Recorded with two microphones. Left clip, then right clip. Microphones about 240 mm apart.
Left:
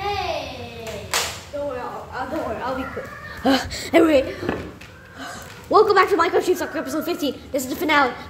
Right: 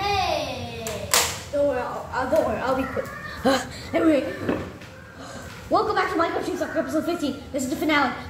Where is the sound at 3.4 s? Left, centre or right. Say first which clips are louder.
Left 2 dB; left.